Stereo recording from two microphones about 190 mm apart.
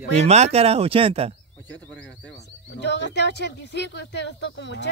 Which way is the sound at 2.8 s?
65° left (ahead or behind).